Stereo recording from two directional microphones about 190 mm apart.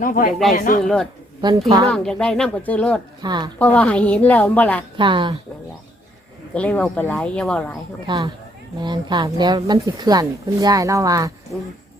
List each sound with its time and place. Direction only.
0.0 s speech: 45° left (ahead or behind)
0.3 s speech: centre (ahead or behind)
0.5 s speech: 50° left (ahead or behind)
0.8 s speech: centre (ahead or behind)
3.2 s speech: 20° right (ahead or behind)
3.6 s speech: 5° left (ahead or behind)
4.9 s speech: 25° right (ahead or behind)
6.5 s speech: 5° left (ahead or behind)
8.0 s speech: 25° right (ahead or behind)